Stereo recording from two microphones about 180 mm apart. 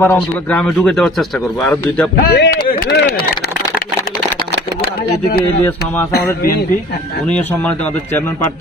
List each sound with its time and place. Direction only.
0.0 s a man's voice: 10° left (ahead or behind)
2.1 s speech: 70° left (ahead or behind)
7.2 s a man's voice: 10° left (ahead or behind)